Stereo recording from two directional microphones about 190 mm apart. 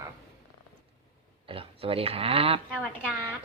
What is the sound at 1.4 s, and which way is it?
Speech, 30° right (ahead or behind).